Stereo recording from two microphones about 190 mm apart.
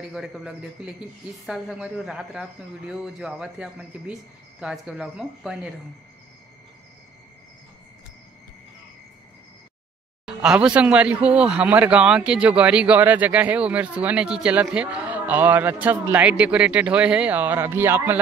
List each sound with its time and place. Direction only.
0.1 s speech: centre (ahead or behind)
10.2 s speech: 5° right (ahead or behind)